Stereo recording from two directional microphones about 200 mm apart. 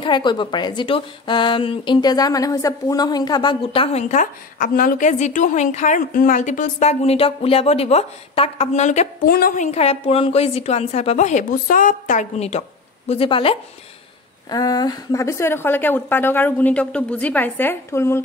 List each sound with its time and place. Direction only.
0.0 s a woman's voice: 25° left (ahead or behind)
9.2 s a woman's voice: 50° left (ahead or behind); by 18.2 s 15° left (ahead or behind)